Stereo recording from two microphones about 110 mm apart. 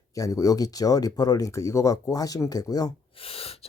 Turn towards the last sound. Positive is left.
turn(degrees=60)  # may be behind; listen again after turning